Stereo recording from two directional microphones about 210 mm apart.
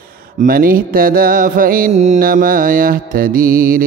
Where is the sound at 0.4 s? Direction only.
45° right (ahead or behind).